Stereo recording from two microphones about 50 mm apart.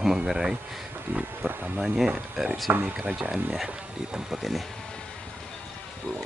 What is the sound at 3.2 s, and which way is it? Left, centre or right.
Speech, right.